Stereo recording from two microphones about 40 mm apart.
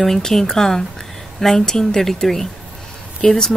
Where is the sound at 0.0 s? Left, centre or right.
Centre.